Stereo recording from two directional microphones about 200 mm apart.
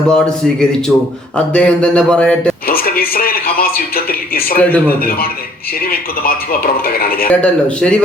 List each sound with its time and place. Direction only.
0.1 s speech: 5° left (ahead or behind)
2.6 s a man's voice: 50° left (ahead or behind)
4.5 s speech: 10° left (ahead or behind)
4.9 s a man's voice: 45° left (ahead or behind)
7.3 s speech: 5° left (ahead or behind)